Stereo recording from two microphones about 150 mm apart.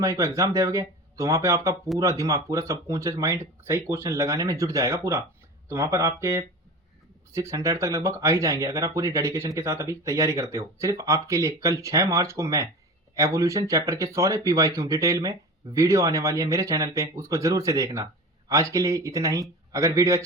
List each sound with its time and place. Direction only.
0.0 s speech: 20° right (ahead or behind)